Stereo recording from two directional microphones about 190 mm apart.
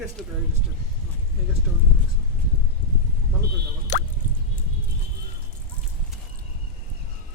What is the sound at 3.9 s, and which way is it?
Drip, 40° left (ahead or behind).